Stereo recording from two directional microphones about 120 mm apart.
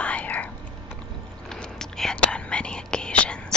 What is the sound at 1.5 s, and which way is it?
Whispering, 5° left (ahead or behind).